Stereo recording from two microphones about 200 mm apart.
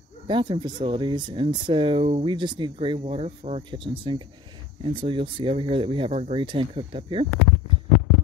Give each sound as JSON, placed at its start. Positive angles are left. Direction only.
{"t": 0.3, "sound": "speech", "side_deg": -25}